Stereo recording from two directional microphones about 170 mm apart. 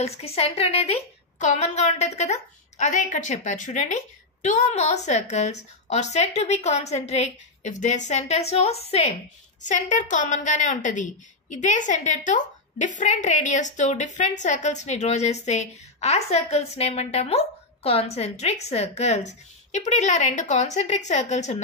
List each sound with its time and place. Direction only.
0.0 s a woman's voice: 35° left (ahead or behind)